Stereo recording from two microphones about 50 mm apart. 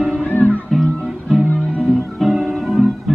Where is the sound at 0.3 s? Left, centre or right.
Left.